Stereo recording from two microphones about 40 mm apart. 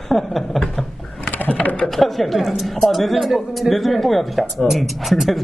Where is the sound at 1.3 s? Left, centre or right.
Left.